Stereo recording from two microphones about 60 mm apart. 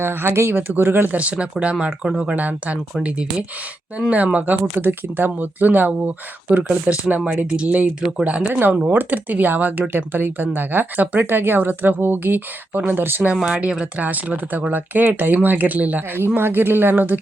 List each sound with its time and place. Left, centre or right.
0.0 s speech: right
1.1 s speech: right
13.3 s speech: centre
14.0 s speech: right